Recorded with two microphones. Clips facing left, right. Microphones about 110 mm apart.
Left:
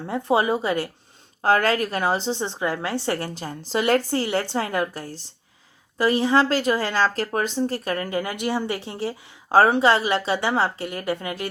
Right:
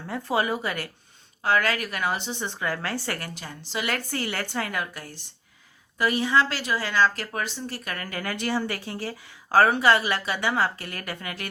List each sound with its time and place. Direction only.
0.0 s speech: 20° left (ahead or behind)
1.4 s a woman's voice: 40° left (ahead or behind); by 11.4 s 25° left (ahead or behind)